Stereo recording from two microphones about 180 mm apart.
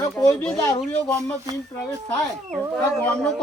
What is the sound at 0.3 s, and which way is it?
Speech, 5° left (ahead or behind).